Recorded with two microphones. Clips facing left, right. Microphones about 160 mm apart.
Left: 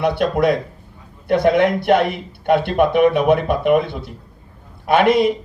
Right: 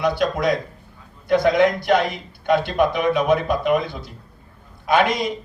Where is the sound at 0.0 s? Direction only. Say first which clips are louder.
Left 3 dB; 60° left (ahead or behind).